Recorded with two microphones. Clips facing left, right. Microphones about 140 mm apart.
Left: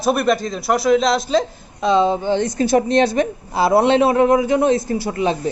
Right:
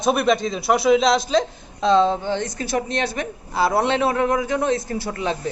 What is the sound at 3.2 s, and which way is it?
A man's voice, 30° left (ahead or behind).